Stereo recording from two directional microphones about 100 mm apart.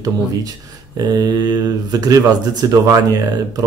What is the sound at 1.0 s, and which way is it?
Speech, 40° right (ahead or behind).